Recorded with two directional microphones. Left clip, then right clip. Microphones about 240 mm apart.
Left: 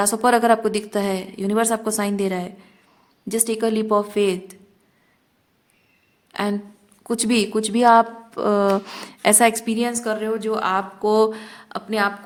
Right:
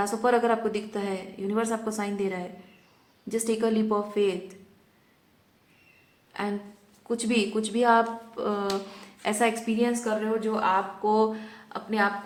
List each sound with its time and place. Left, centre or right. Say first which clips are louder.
0.0 s speech: left 6 dB; left
6.3 s speech: left 7 dB; left